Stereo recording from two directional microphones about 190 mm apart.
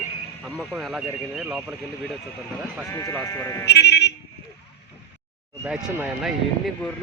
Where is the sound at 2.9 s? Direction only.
15° left (ahead or behind).